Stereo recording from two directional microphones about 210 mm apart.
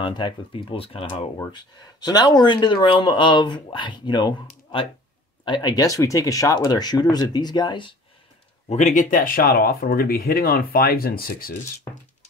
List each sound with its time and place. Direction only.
0.0 s speech: 20° left (ahead or behind)
5.4 s speech: 20° left (ahead or behind)
8.6 s speech: 35° left (ahead or behind)